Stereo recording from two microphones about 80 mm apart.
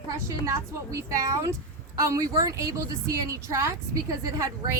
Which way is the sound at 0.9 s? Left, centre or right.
Right.